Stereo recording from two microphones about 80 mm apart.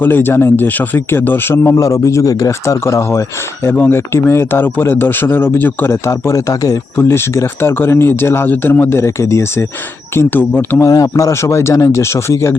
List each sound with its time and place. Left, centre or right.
0.0 s speech: left
2.5 s speech: left
6.9 s speech: left
10.2 s speech: left
10.8 s speech: left